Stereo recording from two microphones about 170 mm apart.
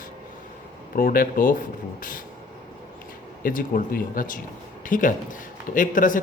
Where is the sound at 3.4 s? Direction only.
55° left (ahead or behind).